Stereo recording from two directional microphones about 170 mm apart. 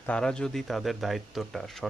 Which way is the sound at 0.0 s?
5° left (ahead or behind).